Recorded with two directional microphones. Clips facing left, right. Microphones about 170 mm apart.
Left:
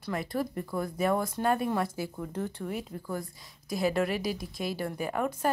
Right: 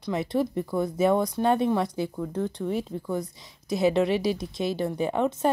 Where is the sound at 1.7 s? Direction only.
5° left (ahead or behind).